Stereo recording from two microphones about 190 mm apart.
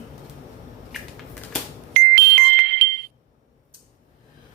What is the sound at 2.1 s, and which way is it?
Music, 60° right (ahead or behind).